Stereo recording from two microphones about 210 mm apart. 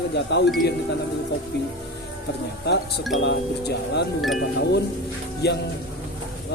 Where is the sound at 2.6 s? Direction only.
50° left (ahead or behind).